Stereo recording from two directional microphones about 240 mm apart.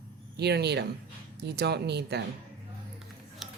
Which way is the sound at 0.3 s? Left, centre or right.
Right.